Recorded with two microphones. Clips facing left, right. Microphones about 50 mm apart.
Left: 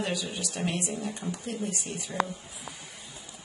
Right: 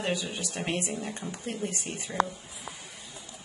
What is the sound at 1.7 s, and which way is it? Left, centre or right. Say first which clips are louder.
Speech: even; right.